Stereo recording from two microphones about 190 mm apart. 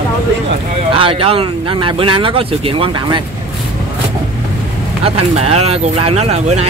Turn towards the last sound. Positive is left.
turn(degrees=-35)  # may be behind; listen again after turning